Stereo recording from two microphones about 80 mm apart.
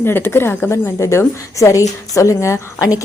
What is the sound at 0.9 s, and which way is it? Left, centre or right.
A woman's voice, left.